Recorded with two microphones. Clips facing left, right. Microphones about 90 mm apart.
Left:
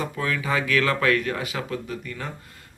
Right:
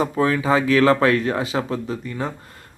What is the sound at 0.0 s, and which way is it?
Speech, 30° right (ahead or behind).